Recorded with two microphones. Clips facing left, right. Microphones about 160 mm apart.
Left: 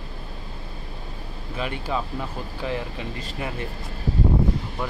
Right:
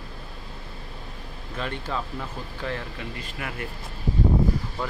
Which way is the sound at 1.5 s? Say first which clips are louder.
Left 3 dB; 10° left (ahead or behind).